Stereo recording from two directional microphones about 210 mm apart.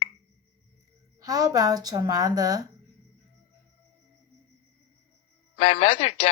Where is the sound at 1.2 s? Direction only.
15° right (ahead or behind).